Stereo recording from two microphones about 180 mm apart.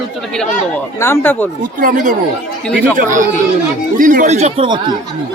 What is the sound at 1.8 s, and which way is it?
Speech, 45° right (ahead or behind).